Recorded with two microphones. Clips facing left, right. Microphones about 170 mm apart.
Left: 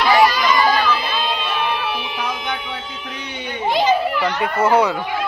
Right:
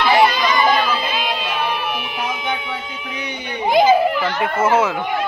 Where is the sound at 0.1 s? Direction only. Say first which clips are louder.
Left 1 dB; 25° right (ahead or behind).